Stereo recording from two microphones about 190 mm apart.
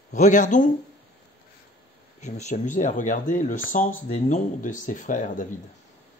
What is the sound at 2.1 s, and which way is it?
Speech, 40° left (ahead or behind).